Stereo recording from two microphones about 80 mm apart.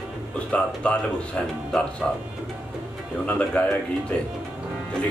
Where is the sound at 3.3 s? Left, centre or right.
Centre.